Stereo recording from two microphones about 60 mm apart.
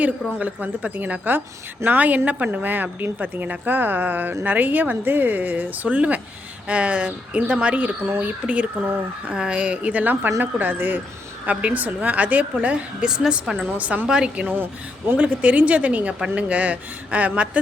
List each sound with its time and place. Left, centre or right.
0.3 s a woman's voice: right
13.1 s a woman's voice: centre
13.7 s a woman's voice: right
14.4 s speech: right
15.1 s a woman's voice: right